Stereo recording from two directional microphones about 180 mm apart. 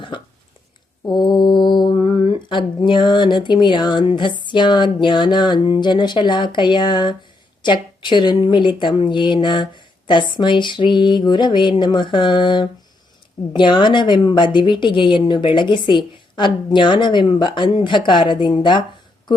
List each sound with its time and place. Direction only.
1.0 s mantra: 25° left (ahead or behind)
4.1 s a woman's voice: 25° left (ahead or behind)
9.0 s a sound: 25° left (ahead or behind)
10.3 s a woman's voice: 25° left (ahead or behind)